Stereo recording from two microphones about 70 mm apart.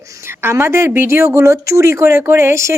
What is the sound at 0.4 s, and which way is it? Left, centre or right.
Speech, right.